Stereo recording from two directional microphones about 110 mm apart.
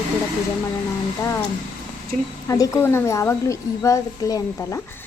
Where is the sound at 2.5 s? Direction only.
30° left (ahead or behind).